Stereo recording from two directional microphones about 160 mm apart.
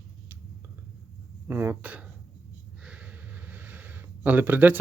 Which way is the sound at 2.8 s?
10° right (ahead or behind).